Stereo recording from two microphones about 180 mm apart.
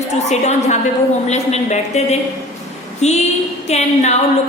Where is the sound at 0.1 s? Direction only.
40° left (ahead or behind).